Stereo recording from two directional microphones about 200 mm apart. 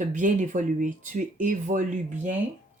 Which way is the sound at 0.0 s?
40° right (ahead or behind).